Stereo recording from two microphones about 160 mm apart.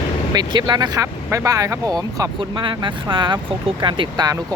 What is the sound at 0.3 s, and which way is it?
Speech, 25° right (ahead or behind).